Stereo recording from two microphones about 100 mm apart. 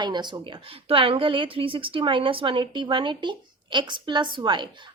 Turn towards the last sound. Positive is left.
turn(degrees=-55)  # may be behind; listen again after turning